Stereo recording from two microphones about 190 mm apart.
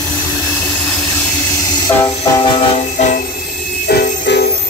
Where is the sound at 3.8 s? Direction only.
60° left (ahead or behind).